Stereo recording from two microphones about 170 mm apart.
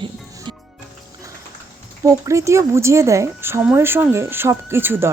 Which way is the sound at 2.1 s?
20° right (ahead or behind).